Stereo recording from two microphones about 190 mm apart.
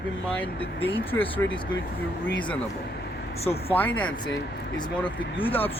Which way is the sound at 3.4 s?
30° left (ahead or behind).